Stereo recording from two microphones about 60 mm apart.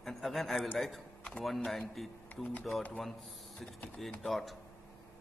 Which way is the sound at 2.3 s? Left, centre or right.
Left.